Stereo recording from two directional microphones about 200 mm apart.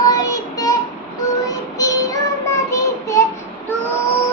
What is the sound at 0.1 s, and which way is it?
Child singing, 15° left (ahead or behind).